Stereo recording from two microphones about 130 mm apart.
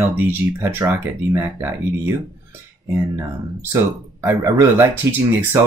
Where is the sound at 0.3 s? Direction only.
15° right (ahead or behind).